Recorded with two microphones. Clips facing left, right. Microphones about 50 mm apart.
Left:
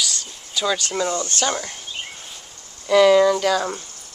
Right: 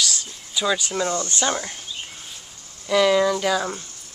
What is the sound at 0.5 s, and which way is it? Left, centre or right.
Speech, centre.